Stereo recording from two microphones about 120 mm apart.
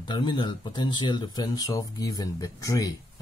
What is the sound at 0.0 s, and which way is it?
Speech, 40° left (ahead or behind).